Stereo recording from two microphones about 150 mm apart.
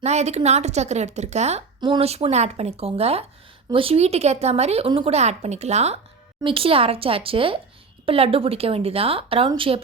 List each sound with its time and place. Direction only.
0.0 s a woman's voice: 50° right (ahead or behind)